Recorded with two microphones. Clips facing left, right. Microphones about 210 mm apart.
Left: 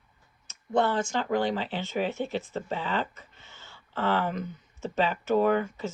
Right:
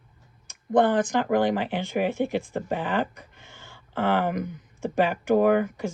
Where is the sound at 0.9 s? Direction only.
20° right (ahead or behind).